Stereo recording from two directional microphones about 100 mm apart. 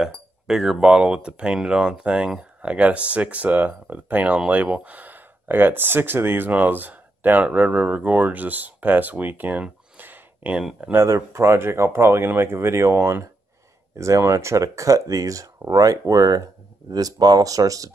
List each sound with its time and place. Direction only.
0.0 s speech: 5° right (ahead or behind)
10.9 s speech: 25° right (ahead or behind)